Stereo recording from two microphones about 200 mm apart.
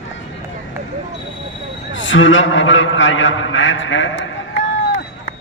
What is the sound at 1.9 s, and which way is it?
A man's voice, 70° left (ahead or behind).